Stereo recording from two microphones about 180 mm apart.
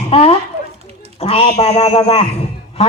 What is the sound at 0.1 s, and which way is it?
A man's voice, 35° left (ahead or behind).